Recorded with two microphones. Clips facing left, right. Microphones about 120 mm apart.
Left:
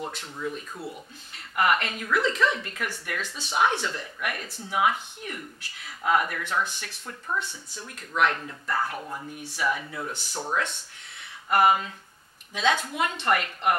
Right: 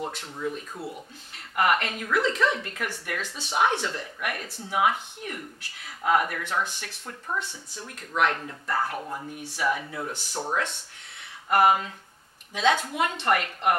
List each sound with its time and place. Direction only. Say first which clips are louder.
0.4 s speech: right 1 dB; 30° right (ahead or behind)
1.5 s speech: even; 45° right (ahead or behind); by 10.8 s 30° right (ahead or behind)
11.5 s speech: right 1 dB; 45° right (ahead or behind)